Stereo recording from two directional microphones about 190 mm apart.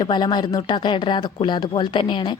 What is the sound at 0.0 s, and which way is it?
Speech, 20° left (ahead or behind).